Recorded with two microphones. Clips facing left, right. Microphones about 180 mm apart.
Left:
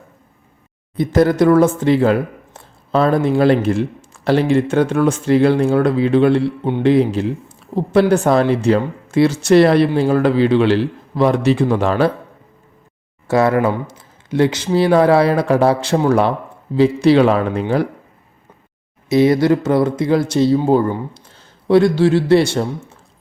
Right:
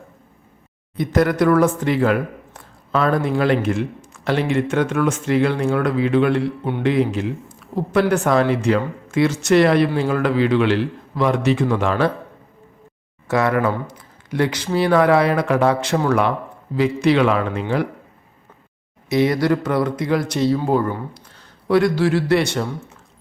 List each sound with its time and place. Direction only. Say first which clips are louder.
0.9 s speech: left 4 dB; 30° left (ahead or behind)
13.2 s speech: left 4 dB; 30° left (ahead or behind)
19.1 s speech: left 5 dB; 25° left (ahead or behind)